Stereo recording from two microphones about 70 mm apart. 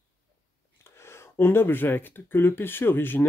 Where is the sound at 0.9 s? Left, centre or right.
Left.